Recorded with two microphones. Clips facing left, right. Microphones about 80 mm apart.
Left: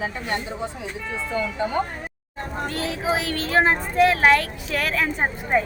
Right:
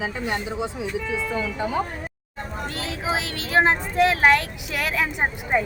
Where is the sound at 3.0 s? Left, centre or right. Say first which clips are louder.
Left 2 dB; right.